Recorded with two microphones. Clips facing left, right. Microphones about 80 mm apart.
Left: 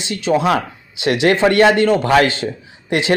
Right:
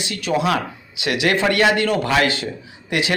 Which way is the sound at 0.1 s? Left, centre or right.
Left.